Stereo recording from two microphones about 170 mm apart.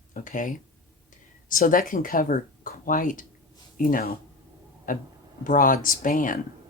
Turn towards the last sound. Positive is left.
turn(degrees=55)  # may be behind; listen again after turning